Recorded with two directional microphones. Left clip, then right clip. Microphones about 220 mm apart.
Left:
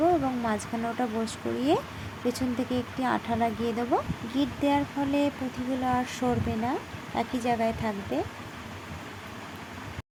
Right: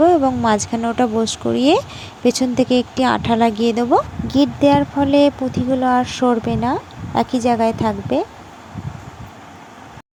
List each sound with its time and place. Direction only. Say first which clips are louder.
0.0 s speech: right 12 dB; 35° right (ahead or behind)